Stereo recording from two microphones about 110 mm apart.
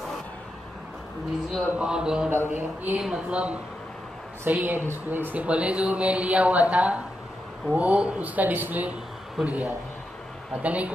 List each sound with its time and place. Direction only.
1.8 s speech: 5° right (ahead or behind)
2.3 s speech: 20° right (ahead or behind)
3.0 s speech: 5° right (ahead or behind)